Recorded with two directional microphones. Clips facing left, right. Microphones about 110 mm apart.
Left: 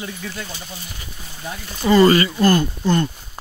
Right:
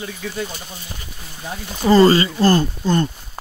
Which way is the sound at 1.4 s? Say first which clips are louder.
Right 2 dB; 20° right (ahead or behind).